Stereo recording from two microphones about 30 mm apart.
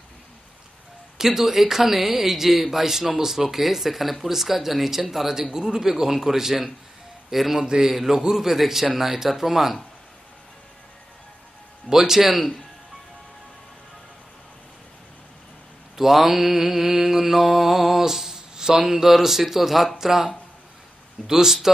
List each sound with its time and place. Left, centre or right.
1.1 s a man's voice: centre
11.9 s speech: centre
12.4 s a man's voice: centre
16.0 s mantra: centre
20.0 s speech: centre
21.3 s speech: centre